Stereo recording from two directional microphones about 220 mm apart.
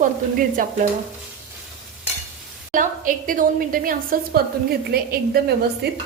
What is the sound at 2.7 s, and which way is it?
A woman's voice, 35° right (ahead or behind).